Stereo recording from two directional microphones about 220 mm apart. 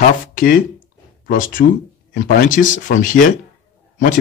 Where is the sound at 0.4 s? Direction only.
40° left (ahead or behind).